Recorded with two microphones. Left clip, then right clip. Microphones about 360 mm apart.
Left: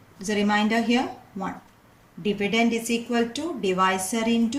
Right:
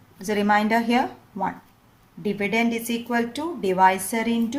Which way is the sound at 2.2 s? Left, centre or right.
Centre.